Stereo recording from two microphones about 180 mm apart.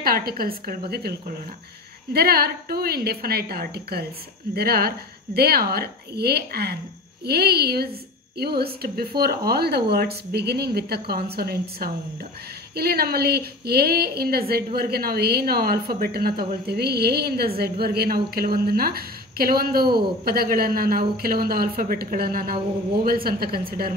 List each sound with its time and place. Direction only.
0.0 s a woman's voice: 55° right (ahead or behind)